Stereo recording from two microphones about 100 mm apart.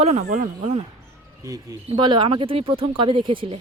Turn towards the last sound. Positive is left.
turn(degrees=-55)  # may be behind; listen again after turning